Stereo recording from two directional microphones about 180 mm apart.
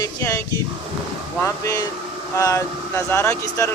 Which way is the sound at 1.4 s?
15° left (ahead or behind).